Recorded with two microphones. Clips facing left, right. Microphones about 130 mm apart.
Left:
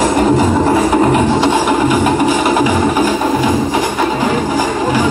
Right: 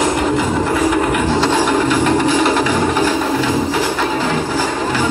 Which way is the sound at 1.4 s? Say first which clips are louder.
Left 2 dB; 15° left (ahead or behind).